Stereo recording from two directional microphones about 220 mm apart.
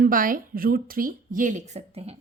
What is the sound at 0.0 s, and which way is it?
A woman's voice, 40° right (ahead or behind).